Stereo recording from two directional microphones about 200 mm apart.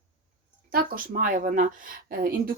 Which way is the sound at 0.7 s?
45° right (ahead or behind).